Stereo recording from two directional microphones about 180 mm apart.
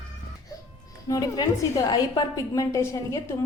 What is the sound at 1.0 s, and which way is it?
A woman's voice, 20° left (ahead or behind).